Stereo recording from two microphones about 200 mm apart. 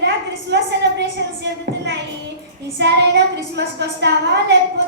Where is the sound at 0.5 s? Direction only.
60° right (ahead or behind).